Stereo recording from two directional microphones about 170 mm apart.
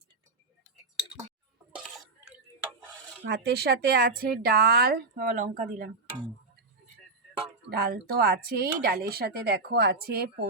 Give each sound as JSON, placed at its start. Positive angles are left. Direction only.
{"t": 1.7, "sound": "a sound", "side_deg": -5}
{"t": 3.2, "sound": "speech", "side_deg": -75}
{"t": 7.7, "sound": "speech", "side_deg": -65}